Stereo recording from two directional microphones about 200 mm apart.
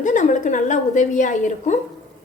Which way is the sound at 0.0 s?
40° left (ahead or behind).